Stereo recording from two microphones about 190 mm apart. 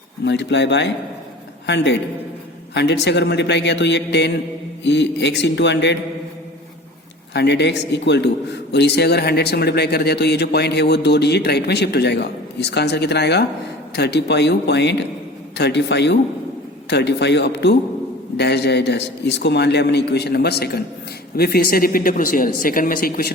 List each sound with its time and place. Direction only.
0.3 s a man's voice: 65° left (ahead or behind)
7.3 s a man's voice: 65° left (ahead or behind)